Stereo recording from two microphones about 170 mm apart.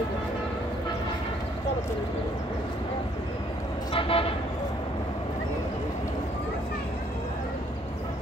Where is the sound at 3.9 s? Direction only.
30° left (ahead or behind).